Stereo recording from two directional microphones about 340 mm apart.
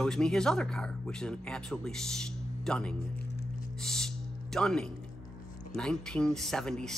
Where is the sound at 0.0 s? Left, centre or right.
Centre.